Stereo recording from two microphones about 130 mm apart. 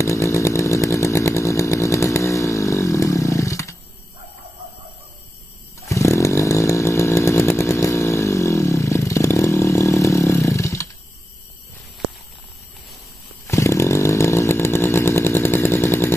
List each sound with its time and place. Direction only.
0.0 s chainsaw: 20° left (ahead or behind)
5.9 s chainsaw: 25° left (ahead or behind)
13.5 s chainsaw: 20° left (ahead or behind)